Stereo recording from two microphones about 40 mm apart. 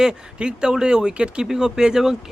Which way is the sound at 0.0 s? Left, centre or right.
Right.